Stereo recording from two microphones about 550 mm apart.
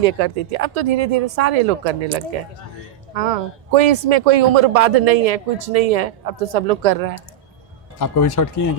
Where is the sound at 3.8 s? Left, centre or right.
Right.